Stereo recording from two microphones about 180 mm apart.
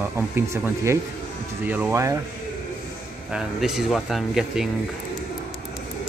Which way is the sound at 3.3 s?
5° right (ahead or behind).